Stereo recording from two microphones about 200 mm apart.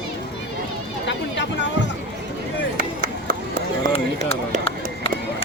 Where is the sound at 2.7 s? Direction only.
45° right (ahead or behind).